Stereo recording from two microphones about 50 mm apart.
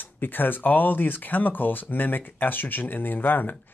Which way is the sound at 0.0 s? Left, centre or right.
Left.